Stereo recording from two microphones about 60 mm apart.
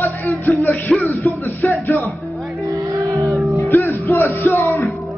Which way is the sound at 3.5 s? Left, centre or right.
Left.